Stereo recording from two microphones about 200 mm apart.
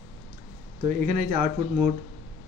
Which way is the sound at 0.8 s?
40° right (ahead or behind).